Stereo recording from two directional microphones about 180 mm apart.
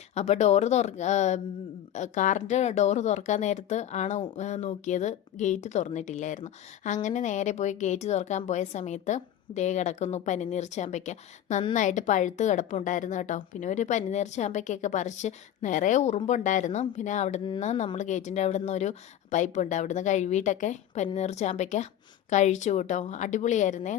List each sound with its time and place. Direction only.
0.1 s a woman's voice: 40° left (ahead or behind)